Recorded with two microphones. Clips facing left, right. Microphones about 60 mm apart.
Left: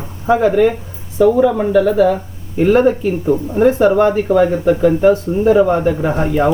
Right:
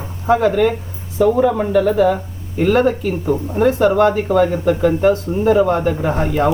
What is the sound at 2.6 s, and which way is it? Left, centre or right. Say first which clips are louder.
Speech: left 3 dB; centre.